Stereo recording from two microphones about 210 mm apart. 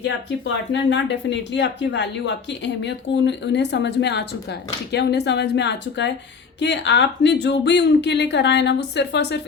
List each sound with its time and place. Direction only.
0.0 s speech: 55° left (ahead or behind)